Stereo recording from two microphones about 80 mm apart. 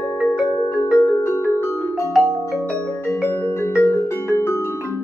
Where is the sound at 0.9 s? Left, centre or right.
Left.